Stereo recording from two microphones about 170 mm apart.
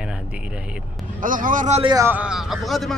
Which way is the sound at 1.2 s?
50° right (ahead or behind).